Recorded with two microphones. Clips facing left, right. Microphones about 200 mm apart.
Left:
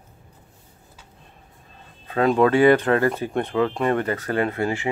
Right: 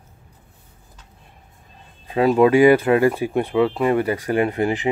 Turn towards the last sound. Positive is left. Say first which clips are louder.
# right 3 dB
turn(degrees=-15)  # may be behind; listen again after turning